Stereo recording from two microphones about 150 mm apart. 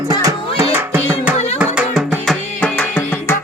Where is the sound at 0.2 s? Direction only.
20° right (ahead or behind).